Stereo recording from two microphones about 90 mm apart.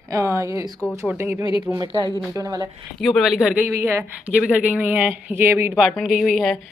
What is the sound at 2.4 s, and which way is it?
Speech, 45° right (ahead or behind).